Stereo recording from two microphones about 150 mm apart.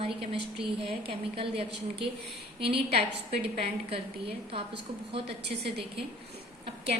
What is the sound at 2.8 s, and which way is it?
A woman's voice, 45° right (ahead or behind).